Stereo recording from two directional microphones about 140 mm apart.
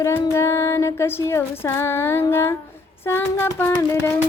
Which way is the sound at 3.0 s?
15° left (ahead or behind).